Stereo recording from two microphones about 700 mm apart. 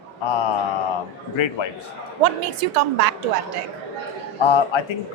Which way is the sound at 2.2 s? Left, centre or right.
Right.